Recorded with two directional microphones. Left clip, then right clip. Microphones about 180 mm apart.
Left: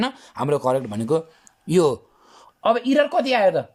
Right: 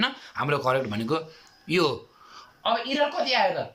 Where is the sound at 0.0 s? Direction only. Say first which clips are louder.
Left 2 dB; 30° left (ahead or behind).